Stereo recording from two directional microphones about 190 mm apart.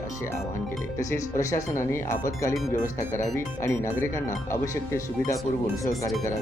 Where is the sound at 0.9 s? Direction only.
15° left (ahead or behind).